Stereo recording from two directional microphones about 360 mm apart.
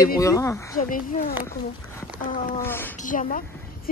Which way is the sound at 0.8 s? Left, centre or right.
Left.